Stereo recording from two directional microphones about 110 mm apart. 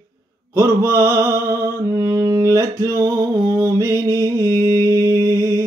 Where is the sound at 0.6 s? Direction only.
25° right (ahead or behind).